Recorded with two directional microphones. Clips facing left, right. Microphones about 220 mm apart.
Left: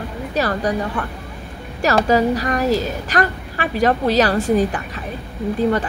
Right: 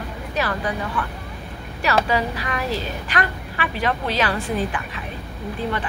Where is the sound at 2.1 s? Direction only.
40° left (ahead or behind).